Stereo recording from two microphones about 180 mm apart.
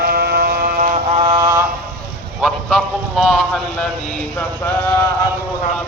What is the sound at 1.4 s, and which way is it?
Mantra, 15° right (ahead or behind).